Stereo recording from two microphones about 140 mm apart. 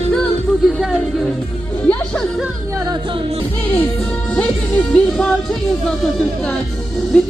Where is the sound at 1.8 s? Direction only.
10° left (ahead or behind).